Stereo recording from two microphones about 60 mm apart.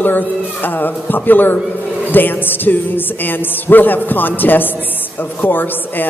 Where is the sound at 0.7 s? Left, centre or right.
Left.